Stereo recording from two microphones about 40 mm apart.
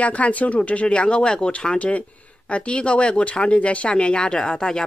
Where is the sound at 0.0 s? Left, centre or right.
Left.